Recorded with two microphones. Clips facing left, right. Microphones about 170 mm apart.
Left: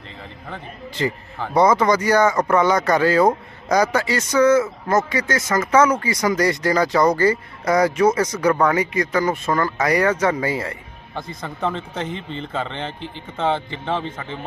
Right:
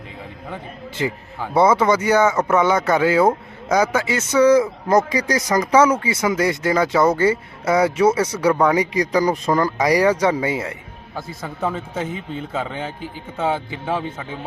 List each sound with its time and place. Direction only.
0.4 s a man's voice: 10° right (ahead or behind)